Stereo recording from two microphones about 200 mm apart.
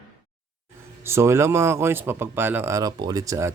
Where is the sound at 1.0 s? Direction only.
15° right (ahead or behind).